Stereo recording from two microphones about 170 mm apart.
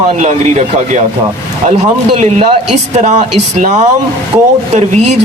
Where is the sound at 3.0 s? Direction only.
45° right (ahead or behind).